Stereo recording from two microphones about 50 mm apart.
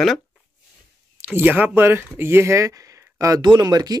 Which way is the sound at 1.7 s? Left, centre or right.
Right.